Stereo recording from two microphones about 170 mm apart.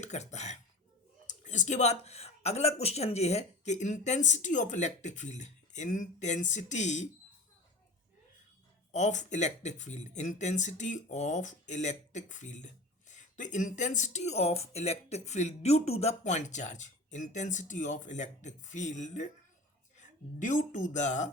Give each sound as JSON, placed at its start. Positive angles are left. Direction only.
{"t": 0.0, "sound": "speech", "side_deg": 40}
{"t": 8.9, "sound": "a woman's voice", "side_deg": 45}